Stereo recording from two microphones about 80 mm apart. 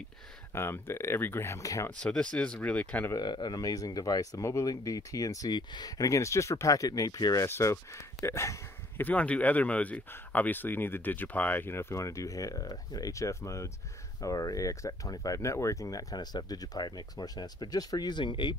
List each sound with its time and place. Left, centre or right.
0.6 s speech: left
1.9 s speech: centre
3.2 s speech: left
3.5 s speech: left
7.4 s speech: left
9.0 s speech: centre; by 18.6 s left